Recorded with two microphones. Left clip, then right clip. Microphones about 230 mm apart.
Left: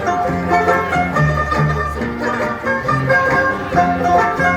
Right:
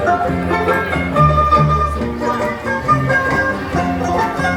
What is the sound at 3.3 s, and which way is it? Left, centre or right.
Music, right.